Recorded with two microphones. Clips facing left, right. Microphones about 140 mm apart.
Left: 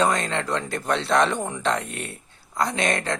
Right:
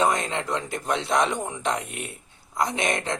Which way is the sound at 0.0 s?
20° right (ahead or behind).